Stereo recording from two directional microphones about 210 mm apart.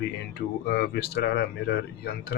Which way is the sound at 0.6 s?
50° left (ahead or behind).